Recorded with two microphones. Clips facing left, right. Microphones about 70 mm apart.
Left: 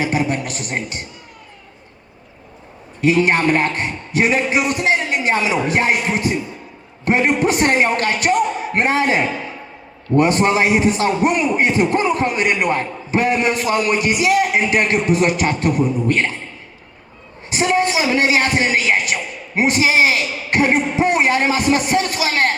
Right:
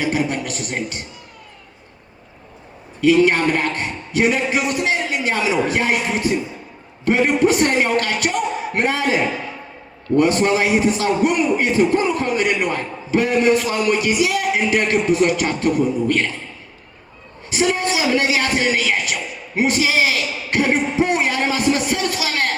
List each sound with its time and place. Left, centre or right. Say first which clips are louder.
0.0 s a man's voice: left 1 dB; left
3.0 s a man's voice: right 1 dB; left
17.5 s a man's voice: left 2 dB; left